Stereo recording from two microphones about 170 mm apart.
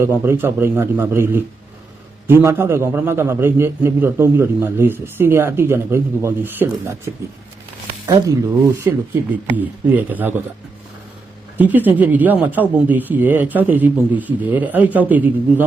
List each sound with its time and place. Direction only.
0.0 s a man's voice: 15° right (ahead or behind)
11.5 s a man's voice: 10° right (ahead or behind)